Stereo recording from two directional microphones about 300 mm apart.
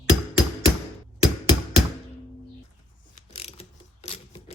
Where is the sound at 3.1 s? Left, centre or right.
Centre.